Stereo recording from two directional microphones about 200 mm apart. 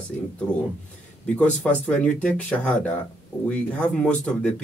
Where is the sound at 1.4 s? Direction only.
5° left (ahead or behind).